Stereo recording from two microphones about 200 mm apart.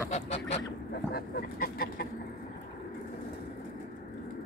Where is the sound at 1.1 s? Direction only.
50° left (ahead or behind).